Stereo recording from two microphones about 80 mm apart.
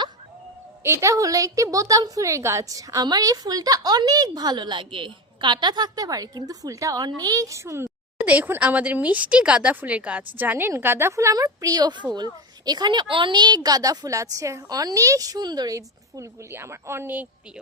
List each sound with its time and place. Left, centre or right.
0.9 s a woman's voice: right
7.0 s a woman's voice: right
8.2 s a woman's voice: right
16.5 s speech: right